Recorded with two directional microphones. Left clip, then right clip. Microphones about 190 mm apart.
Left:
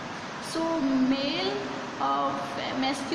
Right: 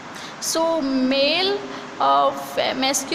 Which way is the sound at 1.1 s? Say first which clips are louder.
Right 9 dB; 60° right (ahead or behind).